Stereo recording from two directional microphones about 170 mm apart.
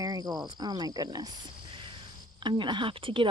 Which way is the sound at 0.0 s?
25° right (ahead or behind).